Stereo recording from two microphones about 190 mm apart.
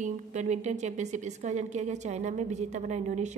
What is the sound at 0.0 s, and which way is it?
A woman's voice, 40° right (ahead or behind).